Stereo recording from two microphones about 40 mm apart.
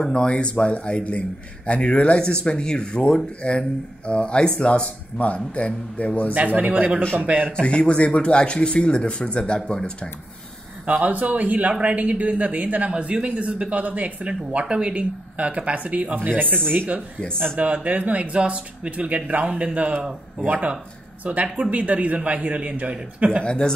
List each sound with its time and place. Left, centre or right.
0.0 s speech: left
6.3 s speech: right
7.6 s speech: left
10.9 s speech: right
12.9 s speech: right
16.2 s speech: right
17.8 s speech: right
21.2 s speech: right
23.4 s speech: left